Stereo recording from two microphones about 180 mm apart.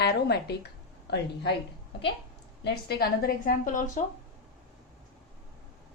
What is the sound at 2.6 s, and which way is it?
A woman's voice, 60° left (ahead or behind).